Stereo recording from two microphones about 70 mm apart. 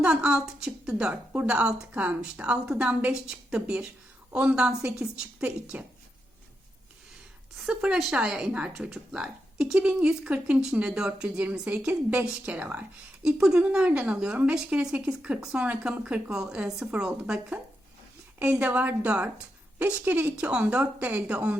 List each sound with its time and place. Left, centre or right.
0.0 s a woman's voice: centre
7.5 s a woman's voice: centre